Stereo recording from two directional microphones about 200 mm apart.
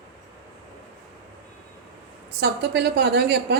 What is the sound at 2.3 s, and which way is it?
A woman's voice, 55° right (ahead or behind).